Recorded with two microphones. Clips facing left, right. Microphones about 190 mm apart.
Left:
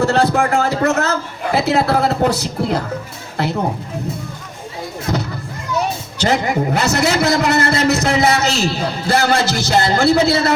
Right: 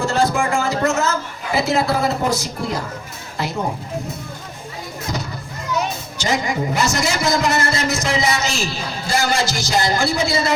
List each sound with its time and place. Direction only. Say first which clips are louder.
0.0 s a man's voice: left 4 dB; 65° left (ahead or behind)
5.1 s music: left 6 dB; 60° left (ahead or behind)
6.1 s a man's voice: left 4 dB; 60° left (ahead or behind)